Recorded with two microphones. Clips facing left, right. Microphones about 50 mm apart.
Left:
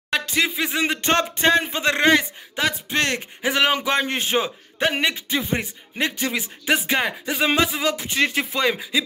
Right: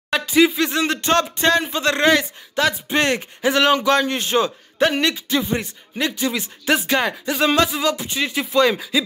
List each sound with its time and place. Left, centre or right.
0.1 s a sound: centre
0.6 s speech: centre
1.0 s speech: left
2.9 s speech: centre
3.4 s speech: centre; by 4.4 s left
4.8 s speech: centre
5.3 s speech: left
6.9 s speech: centre; by 8.5 s left
8.5 s speech: centre